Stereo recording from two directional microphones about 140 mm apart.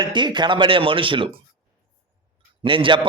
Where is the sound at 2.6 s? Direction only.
35° right (ahead or behind).